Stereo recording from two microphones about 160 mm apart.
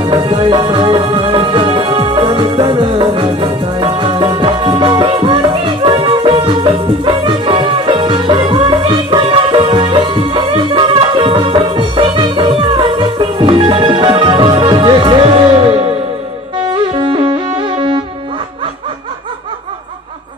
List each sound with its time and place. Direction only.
0.0 s music: 30° right (ahead or behind)